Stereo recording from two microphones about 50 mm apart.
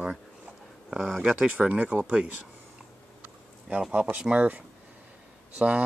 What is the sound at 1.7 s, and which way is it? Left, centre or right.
Speech, right.